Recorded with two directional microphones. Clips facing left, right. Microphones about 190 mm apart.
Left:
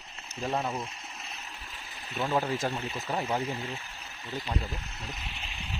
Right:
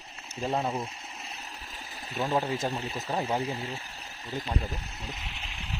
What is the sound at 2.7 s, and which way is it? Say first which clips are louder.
Speech: right 1 dB; 35° right (ahead or behind).